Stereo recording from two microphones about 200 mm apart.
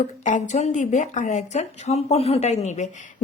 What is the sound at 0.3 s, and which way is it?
Speech, 35° left (ahead or behind).